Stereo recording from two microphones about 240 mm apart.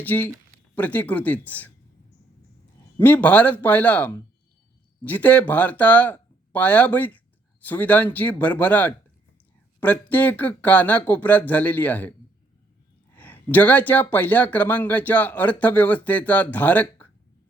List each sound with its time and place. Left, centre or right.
0.0 s speech: centre
3.0 s speech: centre
13.1 s speech: centre